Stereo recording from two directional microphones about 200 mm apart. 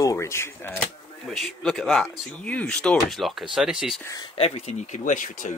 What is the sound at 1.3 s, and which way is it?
Speech, centre (ahead or behind).